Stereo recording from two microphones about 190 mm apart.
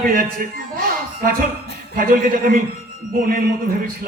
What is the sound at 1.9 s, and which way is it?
Speech, 50° right (ahead or behind).